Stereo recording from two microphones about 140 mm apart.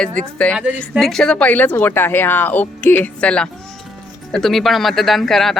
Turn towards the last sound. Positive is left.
turn(degrees=0)  # may be behind; listen again after turning